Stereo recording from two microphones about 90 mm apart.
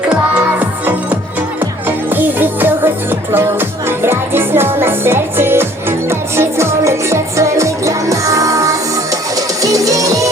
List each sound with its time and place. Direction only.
0.6 s music: 15° right (ahead or behind); by 10.2 s 40° right (ahead or behind)